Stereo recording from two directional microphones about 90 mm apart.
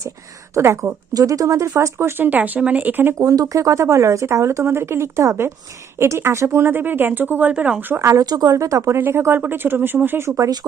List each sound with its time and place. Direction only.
0.5 s speech: 30° right (ahead or behind)
1.1 s speech: 40° right (ahead or behind); by 3.2 s 20° right (ahead or behind)
3.2 s speech: 40° right (ahead or behind)
8.2 s speech: 45° right (ahead or behind)
8.5 s speech: 35° right (ahead or behind)